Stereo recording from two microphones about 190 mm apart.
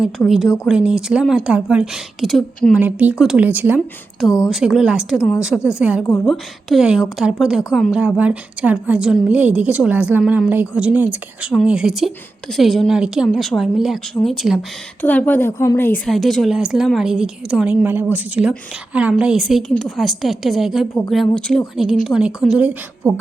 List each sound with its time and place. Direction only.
0.0 s a woman's voice: centre (ahead or behind)
16.0 s a woman's voice: centre (ahead or behind)